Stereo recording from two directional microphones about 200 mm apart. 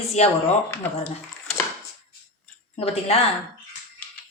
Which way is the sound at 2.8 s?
30° left (ahead or behind).